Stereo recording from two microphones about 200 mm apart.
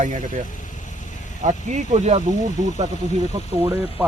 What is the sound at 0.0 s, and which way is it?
Speech, 40° right (ahead or behind).